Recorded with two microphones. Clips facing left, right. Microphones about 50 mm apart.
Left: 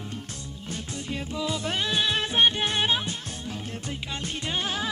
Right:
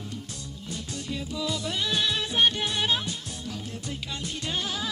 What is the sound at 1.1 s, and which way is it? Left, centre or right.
Music, left.